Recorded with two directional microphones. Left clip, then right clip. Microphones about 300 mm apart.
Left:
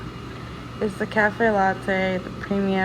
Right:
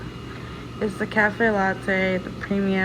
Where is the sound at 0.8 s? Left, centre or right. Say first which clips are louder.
Even; centre.